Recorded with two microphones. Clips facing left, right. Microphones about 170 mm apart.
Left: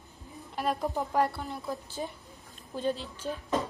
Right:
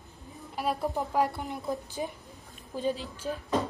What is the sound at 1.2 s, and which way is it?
Speech, 20° right (ahead or behind).